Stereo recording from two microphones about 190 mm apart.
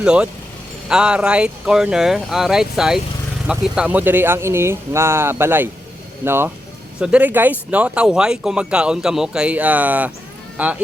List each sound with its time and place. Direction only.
0.0 s speech: 5° right (ahead or behind)